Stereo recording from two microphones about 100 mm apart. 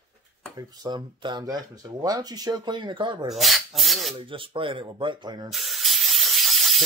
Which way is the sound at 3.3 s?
Centre (ahead or behind).